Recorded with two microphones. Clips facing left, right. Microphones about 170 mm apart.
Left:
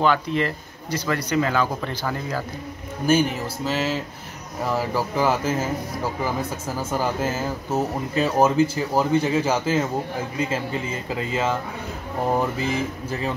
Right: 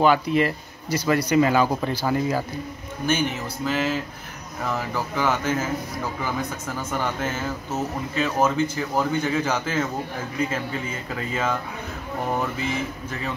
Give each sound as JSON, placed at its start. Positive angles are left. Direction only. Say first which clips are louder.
{"t": 0.0, "sound": "speech", "louder": "right 2 dB", "side_deg": -10}
{"t": 3.1, "sound": "speech", "louder": "left 4 dB", "side_deg": 35}